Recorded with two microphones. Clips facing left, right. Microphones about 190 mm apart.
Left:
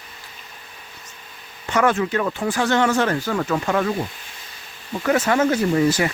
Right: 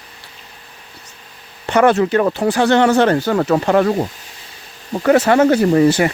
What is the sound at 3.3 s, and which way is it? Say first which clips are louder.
Speech: right 7 dB; 40° right (ahead or behind).